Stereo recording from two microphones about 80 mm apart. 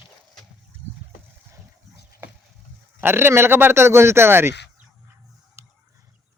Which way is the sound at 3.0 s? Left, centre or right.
Right.